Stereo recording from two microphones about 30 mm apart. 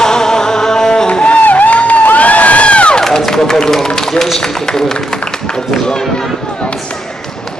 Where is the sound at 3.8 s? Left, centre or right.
Left.